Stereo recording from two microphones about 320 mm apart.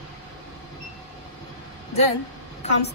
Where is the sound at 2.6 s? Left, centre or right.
Centre.